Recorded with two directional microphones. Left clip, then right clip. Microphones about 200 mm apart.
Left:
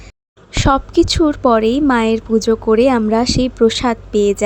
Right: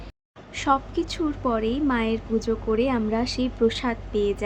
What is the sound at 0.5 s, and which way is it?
A woman's voice, 45° left (ahead or behind).